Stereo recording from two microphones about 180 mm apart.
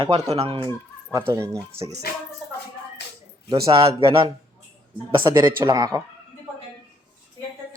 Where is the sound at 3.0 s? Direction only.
70° left (ahead or behind).